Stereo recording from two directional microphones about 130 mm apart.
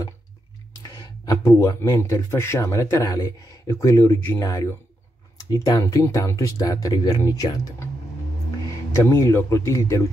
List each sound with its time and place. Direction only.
0.9 s speech: 30° left (ahead or behind)
9.0 s speech: 20° left (ahead or behind)